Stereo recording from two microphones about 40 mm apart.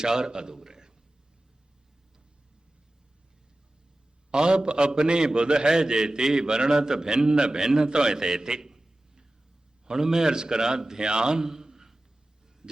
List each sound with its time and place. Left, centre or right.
0.0 s a man's voice: centre
4.3 s a man's voice: right